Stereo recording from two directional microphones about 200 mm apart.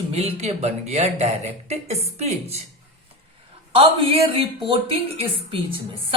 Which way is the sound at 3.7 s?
25° right (ahead or behind).